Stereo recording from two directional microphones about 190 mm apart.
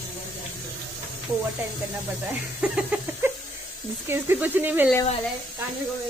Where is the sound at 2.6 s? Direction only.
5° right (ahead or behind).